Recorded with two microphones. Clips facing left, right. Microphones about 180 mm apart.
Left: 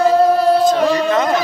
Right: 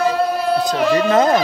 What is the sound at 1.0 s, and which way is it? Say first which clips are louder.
Speech: right 2 dB; 30° right (ahead or behind).